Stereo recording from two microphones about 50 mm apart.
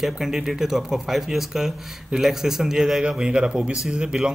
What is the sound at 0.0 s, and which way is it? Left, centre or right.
A man's voice, centre.